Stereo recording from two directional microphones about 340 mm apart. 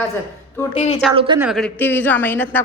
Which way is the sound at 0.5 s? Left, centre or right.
Centre.